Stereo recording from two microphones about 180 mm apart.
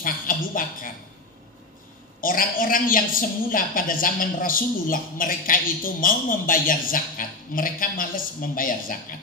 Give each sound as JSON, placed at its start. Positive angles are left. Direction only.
{"t": 0.0, "sound": "a woman's voice", "side_deg": 50}
{"t": 2.2, "sound": "a woman's voice", "side_deg": 50}